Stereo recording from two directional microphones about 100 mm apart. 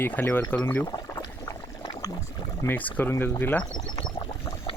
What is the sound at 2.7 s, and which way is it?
Speech, 20° left (ahead or behind).